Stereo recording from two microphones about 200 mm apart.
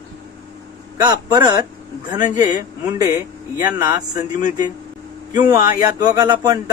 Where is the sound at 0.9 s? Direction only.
15° right (ahead or behind).